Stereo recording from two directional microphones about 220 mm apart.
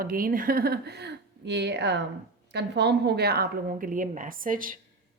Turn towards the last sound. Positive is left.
turn(degrees=-40)  # may be behind; listen again after turning